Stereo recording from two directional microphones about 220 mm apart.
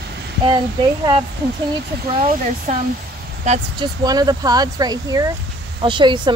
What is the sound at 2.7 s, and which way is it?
Speech, 30° right (ahead or behind).